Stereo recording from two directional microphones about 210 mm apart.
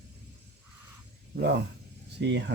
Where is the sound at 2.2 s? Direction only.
55° right (ahead or behind).